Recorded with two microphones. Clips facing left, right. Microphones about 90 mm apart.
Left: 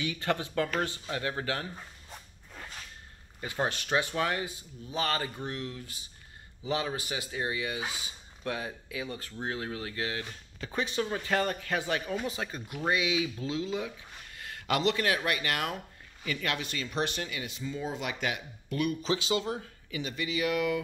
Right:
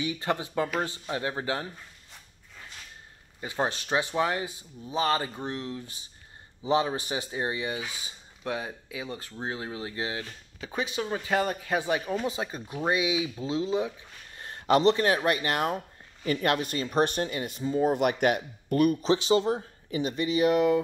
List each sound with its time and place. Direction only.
0.0 s speech: 20° right (ahead or behind)
3.3 s speech: 25° right (ahead or behind)
10.6 s speech: 10° right (ahead or behind); by 17.8 s 40° right (ahead or behind)
17.8 s speech: 55° right (ahead or behind)
19.2 s speech: 35° right (ahead or behind)